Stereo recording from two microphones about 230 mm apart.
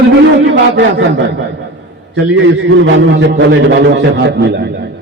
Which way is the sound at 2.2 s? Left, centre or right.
Right.